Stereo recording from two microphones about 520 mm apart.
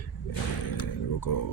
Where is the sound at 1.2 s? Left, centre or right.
Left.